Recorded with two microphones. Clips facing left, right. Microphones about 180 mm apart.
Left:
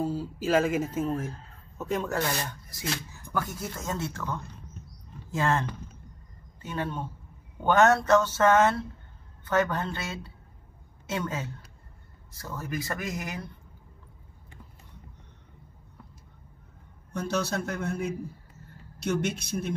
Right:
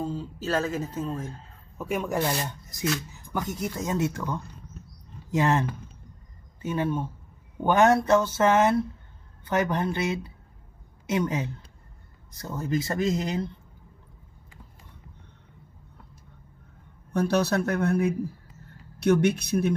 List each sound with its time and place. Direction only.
0.0 s speech: 10° left (ahead or behind)
1.8 s speech: 10° right (ahead or behind)
6.6 s speech: 10° right (ahead or behind)
17.1 s speech: 60° right (ahead or behind)